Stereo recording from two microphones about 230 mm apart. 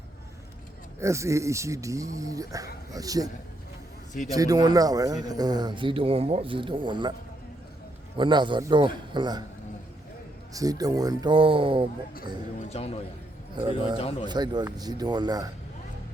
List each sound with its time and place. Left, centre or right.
0.9 s speech: centre
4.3 s speech: centre
8.2 s speech: centre
10.5 s speech: centre
12.7 s a man's voice: left
13.6 s speech: centre
14.0 s a man's voice: left
14.3 s speech: centre